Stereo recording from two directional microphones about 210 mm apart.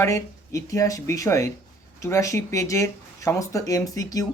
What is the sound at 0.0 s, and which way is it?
Speech, 15° left (ahead or behind).